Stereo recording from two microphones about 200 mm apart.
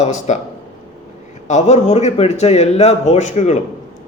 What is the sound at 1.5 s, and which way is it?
Speech, 35° left (ahead or behind).